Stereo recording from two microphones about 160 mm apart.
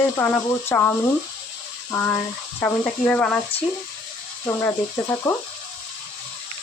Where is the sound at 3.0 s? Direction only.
5° left (ahead or behind).